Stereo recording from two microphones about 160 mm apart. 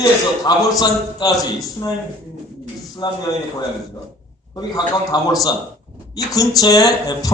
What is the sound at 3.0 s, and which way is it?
Speech, 25° left (ahead or behind).